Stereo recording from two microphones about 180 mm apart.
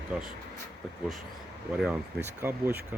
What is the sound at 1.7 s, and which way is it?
Speech, 5° right (ahead or behind).